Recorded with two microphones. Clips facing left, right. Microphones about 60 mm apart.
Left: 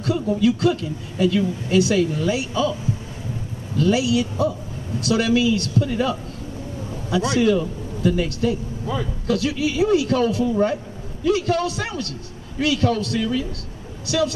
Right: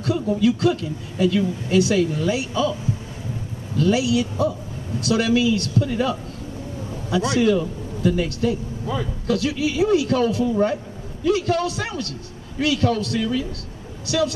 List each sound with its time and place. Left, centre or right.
0.0 s speech: centre